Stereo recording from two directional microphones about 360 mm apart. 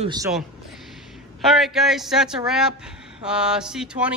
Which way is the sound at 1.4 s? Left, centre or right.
Centre.